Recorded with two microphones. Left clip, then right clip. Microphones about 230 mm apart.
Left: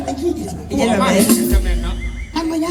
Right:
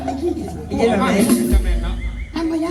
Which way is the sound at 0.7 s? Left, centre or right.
Left.